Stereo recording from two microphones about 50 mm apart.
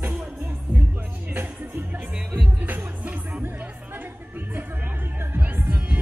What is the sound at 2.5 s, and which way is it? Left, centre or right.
Music, right.